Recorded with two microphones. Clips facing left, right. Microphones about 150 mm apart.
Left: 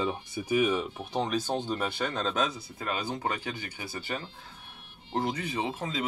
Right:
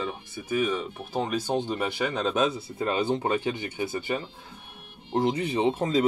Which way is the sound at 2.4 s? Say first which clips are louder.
Right 6 dB; 25° right (ahead or behind).